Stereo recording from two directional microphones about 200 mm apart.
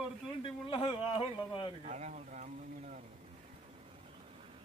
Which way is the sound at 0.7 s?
25° left (ahead or behind).